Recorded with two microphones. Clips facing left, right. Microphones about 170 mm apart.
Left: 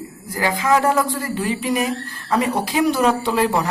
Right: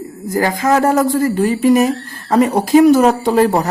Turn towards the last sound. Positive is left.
turn(degrees=-45)  # may be behind; listen again after turning